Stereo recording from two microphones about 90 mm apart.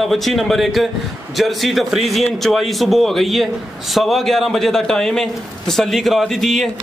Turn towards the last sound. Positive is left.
turn(degrees=5)  # may be behind; listen again after turning